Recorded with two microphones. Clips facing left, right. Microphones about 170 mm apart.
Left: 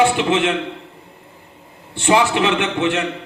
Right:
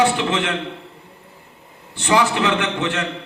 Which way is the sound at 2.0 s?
20° left (ahead or behind).